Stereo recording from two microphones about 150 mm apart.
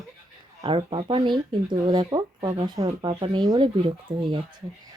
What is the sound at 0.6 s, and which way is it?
Speech, 35° right (ahead or behind).